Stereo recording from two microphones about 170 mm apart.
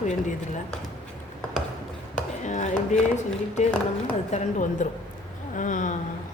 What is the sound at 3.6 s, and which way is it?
Speech, 45° left (ahead or behind).